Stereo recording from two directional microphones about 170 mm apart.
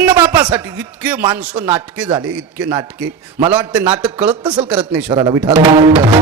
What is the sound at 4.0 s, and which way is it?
Speech, 10° right (ahead or behind).